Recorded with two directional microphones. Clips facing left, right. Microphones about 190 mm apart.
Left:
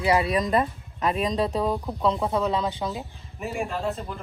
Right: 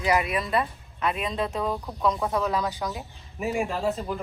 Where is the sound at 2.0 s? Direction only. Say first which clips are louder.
Left 1 dB; 30° left (ahead or behind).